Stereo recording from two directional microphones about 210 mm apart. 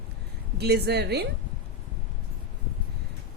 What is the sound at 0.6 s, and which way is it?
Speech, 50° right (ahead or behind).